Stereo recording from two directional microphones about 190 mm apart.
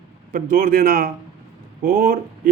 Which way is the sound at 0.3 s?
50° right (ahead or behind).